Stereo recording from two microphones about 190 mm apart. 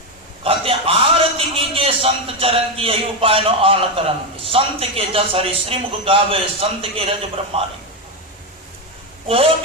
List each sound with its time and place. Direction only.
0.4 s a man's voice: 30° right (ahead or behind)
9.2 s a man's voice: 30° right (ahead or behind)